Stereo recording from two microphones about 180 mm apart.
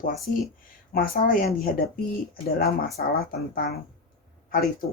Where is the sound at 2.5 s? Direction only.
55° left (ahead or behind).